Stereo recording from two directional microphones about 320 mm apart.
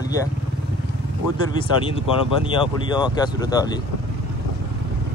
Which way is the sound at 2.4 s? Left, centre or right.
Centre.